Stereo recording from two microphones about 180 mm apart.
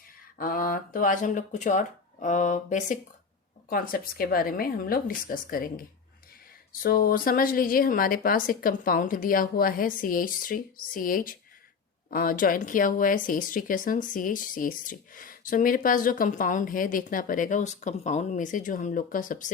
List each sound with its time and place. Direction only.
0.3 s a woman's voice: 50° left (ahead or behind)
6.8 s a woman's voice: 55° left (ahead or behind)